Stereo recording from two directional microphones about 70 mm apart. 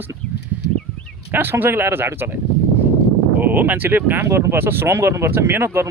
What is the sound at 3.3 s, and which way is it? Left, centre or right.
Speech, right.